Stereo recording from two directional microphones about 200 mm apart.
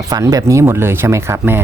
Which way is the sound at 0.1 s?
20° right (ahead or behind).